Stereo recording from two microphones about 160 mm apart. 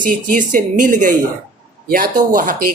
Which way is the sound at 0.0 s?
55° right (ahead or behind).